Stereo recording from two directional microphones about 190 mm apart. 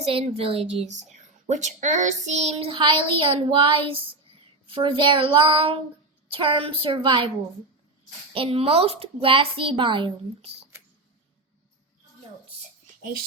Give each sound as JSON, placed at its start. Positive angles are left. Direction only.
{"t": 0.0, "sound": "a woman's voice", "side_deg": -30}
{"t": 0.9, "sound": "child singing", "side_deg": -40}
{"t": 8.3, "sound": "child singing", "side_deg": -30}